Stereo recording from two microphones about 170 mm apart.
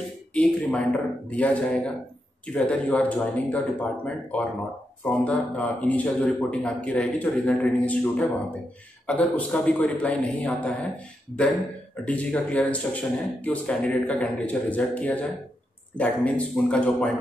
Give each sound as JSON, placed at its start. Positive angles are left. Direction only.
{"t": 0.3, "sound": "speech", "side_deg": 5}
{"t": 12.0, "sound": "speech", "side_deg": 10}